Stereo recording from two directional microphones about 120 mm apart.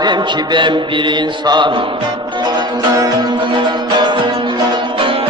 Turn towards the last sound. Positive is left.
turn(degrees=-40)  # may be behind; listen again after turning